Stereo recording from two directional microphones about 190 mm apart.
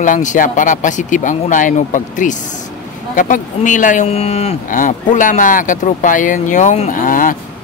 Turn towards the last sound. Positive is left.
turn(degrees=45)  # may be behind; listen again after turning